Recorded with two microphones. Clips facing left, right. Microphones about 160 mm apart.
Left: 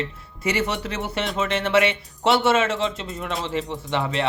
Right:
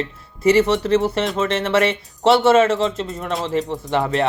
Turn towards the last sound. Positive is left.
turn(degrees=-45)  # may be behind; listen again after turning